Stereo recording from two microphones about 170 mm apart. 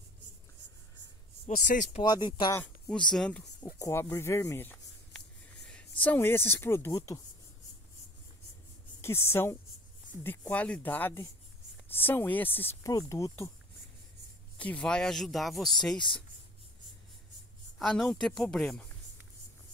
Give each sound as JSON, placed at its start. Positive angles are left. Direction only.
{"t": 1.6, "sound": "speech", "side_deg": 50}
{"t": 2.0, "sound": "speech", "side_deg": 25}
{"t": 2.5, "sound": "speech", "side_deg": 5}
{"t": 3.8, "sound": "speech", "side_deg": 20}
{"t": 9.0, "sound": "speech", "side_deg": 15}
{"t": 14.6, "sound": "speech", "side_deg": 5}
{"t": 17.7, "sound": "speech", "side_deg": 0}